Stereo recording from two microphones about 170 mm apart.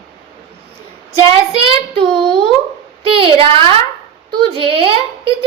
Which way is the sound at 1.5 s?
35° right (ahead or behind).